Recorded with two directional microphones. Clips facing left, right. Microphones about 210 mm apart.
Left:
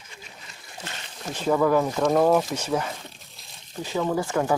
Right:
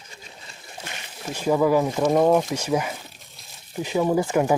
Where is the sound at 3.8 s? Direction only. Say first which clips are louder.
Right 4 dB; 15° right (ahead or behind).